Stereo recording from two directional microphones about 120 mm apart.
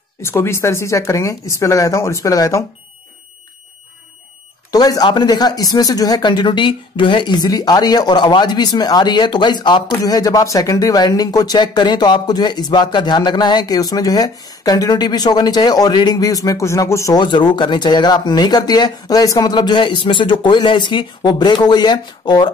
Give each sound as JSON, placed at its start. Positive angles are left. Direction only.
{"t": 0.2, "sound": "speech", "side_deg": 20}
{"t": 4.6, "sound": "speech", "side_deg": 30}
{"t": 17.2, "sound": "speech", "side_deg": 40}